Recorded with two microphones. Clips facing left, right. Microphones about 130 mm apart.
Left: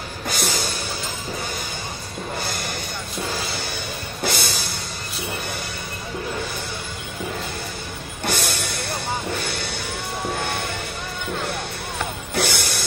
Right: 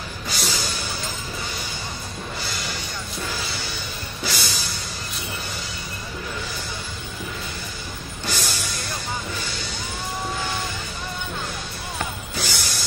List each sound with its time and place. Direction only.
0.3 s music: 55° left (ahead or behind)
2.4 s music: 55° left (ahead or behind)
4.2 s music: 55° left (ahead or behind)
8.3 s music: 60° left (ahead or behind)
10.3 s vehicle: 60° left (ahead or behind)
12.4 s music: 60° left (ahead or behind)